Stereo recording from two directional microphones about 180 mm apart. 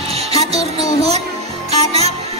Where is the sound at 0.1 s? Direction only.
35° right (ahead or behind).